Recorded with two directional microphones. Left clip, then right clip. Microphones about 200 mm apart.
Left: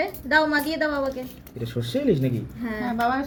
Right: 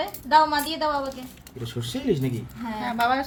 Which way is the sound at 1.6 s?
20° right (ahead or behind).